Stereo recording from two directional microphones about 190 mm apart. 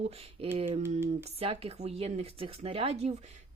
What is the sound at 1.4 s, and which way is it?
Speech, 30° right (ahead or behind).